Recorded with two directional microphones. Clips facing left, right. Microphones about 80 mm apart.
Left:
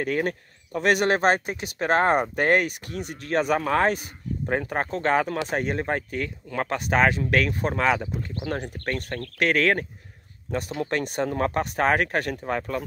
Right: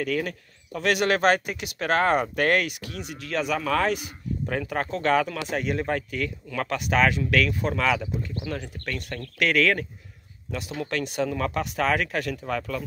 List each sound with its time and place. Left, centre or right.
0.0 s speech: left
8.5 s speech: left